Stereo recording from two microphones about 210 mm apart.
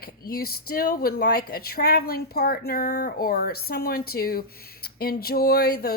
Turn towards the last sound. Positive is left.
turn(degrees=45)  # may be behind; listen again after turning